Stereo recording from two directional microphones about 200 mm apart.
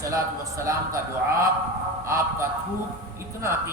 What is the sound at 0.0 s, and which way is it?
Speech, 15° right (ahead or behind).